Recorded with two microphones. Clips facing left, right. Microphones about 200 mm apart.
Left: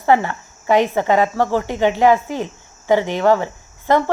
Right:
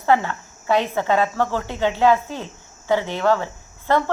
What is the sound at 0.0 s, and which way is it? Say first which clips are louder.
Speech: left 3 dB; 15° left (ahead or behind).